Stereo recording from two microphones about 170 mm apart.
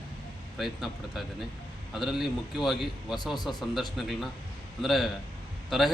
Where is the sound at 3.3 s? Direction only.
25° left (ahead or behind).